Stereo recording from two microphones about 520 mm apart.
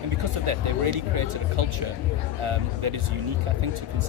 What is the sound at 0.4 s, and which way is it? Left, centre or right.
Speech, right.